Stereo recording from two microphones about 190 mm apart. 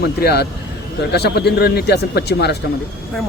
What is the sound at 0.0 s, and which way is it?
Speech, 55° left (ahead or behind).